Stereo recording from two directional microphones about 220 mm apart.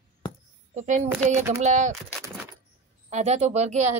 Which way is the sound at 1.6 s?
35° right (ahead or behind).